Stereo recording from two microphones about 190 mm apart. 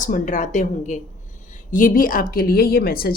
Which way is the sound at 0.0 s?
45° left (ahead or behind).